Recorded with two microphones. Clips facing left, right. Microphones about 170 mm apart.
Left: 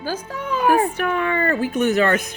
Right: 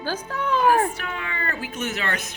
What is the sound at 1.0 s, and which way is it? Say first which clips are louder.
Speech: left 11 dB; 55° left (ahead or behind).